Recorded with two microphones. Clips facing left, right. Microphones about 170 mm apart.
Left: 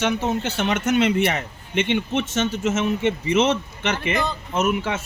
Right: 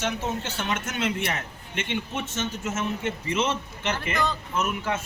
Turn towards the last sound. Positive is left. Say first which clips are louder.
# left 5 dB
turn(degrees=80)